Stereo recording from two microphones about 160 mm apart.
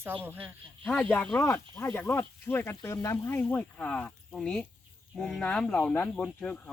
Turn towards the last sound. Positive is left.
turn(degrees=5)  # may be behind; listen again after turning